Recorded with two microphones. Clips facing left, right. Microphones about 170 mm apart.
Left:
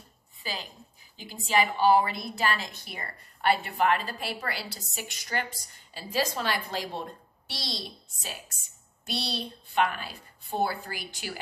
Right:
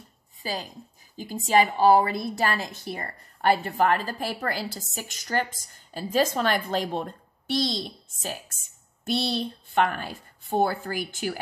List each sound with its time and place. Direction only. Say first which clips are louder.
0.4 s a woman's voice: right 5 dB; 40° right (ahead or behind)